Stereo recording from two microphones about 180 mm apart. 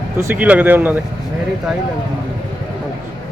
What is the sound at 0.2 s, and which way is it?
Speech, 10° right (ahead or behind).